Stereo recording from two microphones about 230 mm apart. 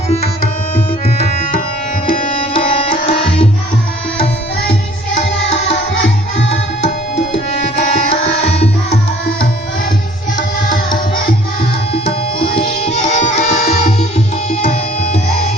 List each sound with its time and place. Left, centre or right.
1.2 s music: left
2.4 s tabla: left
4.7 s music: left
7.3 s tabla: left
12.8 s music: left
14.6 s tabla: left